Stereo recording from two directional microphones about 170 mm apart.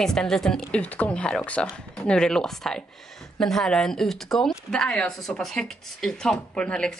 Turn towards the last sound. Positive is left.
turn(degrees=5)  # may be behind; listen again after turning